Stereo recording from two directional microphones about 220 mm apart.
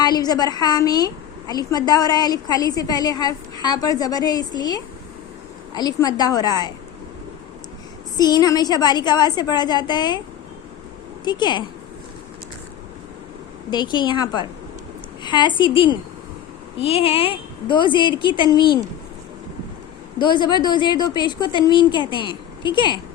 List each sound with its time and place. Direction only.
0.0 s a woman's voice: 20° left (ahead or behind)
8.1 s a woman's voice: 20° left (ahead or behind)
11.3 s a woman's voice: 20° left (ahead or behind)
13.7 s a woman's voice: 20° left (ahead or behind)
20.1 s a woman's voice: 20° left (ahead or behind)